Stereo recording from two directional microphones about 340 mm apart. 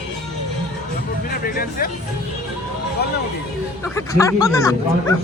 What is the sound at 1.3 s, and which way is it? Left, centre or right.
Speech, left.